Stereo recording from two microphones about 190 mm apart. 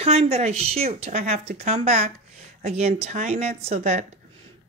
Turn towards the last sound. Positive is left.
turn(degrees=-35)  # may be behind; listen again after turning